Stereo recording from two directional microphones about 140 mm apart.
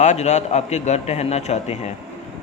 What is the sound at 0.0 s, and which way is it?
A man's voice, 55° left (ahead or behind).